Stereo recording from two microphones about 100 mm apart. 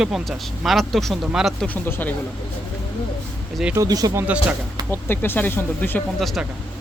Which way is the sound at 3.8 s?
40° right (ahead or behind).